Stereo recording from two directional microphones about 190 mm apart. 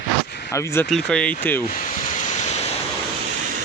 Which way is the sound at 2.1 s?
40° left (ahead or behind).